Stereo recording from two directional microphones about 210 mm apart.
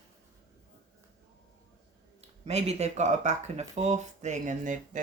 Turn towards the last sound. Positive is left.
turn(degrees=-35)  # may be behind; listen again after turning